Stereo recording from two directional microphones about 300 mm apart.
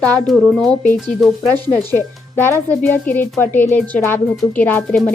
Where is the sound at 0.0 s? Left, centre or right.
Centre.